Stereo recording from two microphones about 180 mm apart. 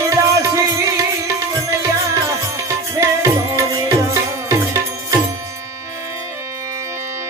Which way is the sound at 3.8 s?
15° right (ahead or behind).